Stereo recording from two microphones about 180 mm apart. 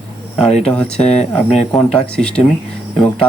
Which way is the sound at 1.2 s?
35° left (ahead or behind).